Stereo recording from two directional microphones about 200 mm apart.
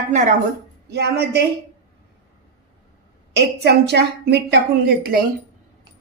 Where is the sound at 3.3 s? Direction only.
55° right (ahead or behind).